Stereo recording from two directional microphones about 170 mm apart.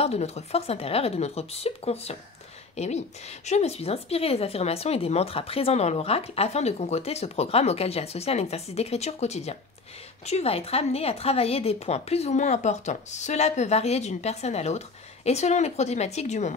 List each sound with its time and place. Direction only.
0.0 s a woman's voice: 40° left (ahead or behind)